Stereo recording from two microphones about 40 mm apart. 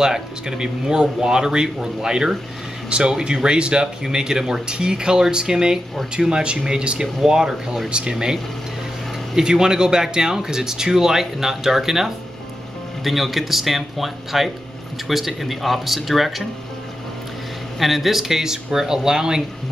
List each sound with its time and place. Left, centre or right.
0.0 s speech: centre
17.7 s speech: centre